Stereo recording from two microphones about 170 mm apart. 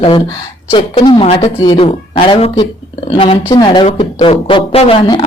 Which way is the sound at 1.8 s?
30° left (ahead or behind).